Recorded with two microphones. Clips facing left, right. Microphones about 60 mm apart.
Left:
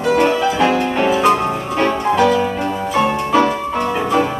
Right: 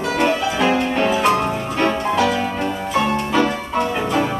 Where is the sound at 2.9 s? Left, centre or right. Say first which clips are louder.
Left 3 dB; centre.